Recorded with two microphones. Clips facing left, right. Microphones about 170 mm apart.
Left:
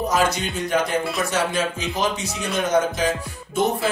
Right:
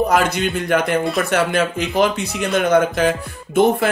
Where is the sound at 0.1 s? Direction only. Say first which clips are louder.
Right 4 dB; 60° right (ahead or behind).